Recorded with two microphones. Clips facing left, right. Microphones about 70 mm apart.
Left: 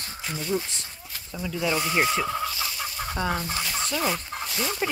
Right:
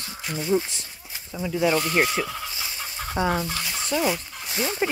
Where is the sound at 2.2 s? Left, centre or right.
Left.